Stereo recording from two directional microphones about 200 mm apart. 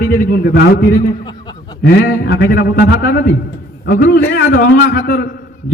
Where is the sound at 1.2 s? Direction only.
20° left (ahead or behind).